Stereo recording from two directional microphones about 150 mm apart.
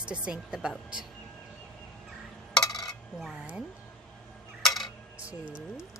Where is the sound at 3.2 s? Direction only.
5° right (ahead or behind).